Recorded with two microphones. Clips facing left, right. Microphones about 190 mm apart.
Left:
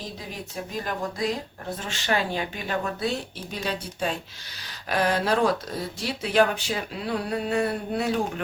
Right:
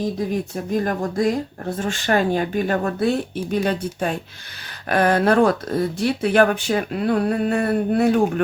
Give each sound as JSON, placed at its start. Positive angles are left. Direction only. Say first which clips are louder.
{"t": 0.2, "sound": "speech", "louder": "right 11 dB", "side_deg": -50}